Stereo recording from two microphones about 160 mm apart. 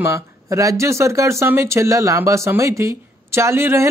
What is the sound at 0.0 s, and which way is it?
Speech, 20° right (ahead or behind).